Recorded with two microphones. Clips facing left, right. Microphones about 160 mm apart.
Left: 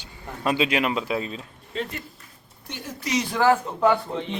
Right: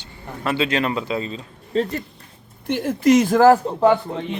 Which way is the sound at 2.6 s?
55° right (ahead or behind).